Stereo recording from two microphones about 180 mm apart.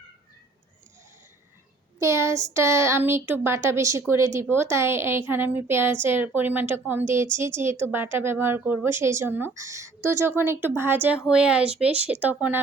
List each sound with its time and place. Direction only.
2.0 s speech: 15° right (ahead or behind)